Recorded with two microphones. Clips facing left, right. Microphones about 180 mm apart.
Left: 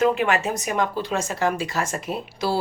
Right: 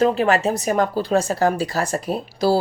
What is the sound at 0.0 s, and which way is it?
A woman's voice, 35° right (ahead or behind).